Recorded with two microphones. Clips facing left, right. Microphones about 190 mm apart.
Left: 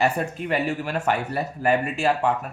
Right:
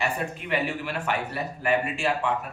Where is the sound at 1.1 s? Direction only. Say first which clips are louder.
Left 5 dB; 40° left (ahead or behind).